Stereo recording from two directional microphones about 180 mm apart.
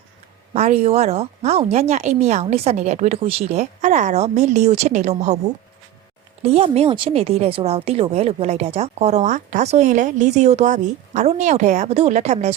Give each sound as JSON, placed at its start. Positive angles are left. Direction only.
{"t": 0.5, "sound": "a woman's voice", "side_deg": -35}
{"t": 6.4, "sound": "a woman's voice", "side_deg": -35}